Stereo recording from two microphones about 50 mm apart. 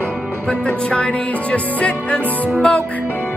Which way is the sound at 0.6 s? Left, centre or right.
Left.